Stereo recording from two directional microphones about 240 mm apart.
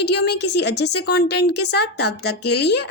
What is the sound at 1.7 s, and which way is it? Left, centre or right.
Speech, left.